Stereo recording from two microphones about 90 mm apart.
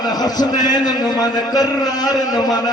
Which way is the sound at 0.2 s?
50° left (ahead or behind).